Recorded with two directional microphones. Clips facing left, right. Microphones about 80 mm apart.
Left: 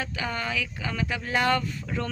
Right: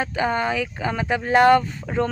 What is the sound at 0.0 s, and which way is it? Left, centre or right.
Speech, right.